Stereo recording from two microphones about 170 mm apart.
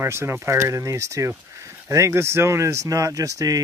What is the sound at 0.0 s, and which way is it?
Speech, 15° right (ahead or behind).